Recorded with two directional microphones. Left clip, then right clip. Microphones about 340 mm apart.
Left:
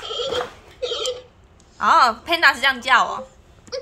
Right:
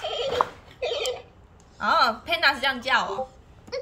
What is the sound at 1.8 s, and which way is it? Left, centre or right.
A woman's voice, centre.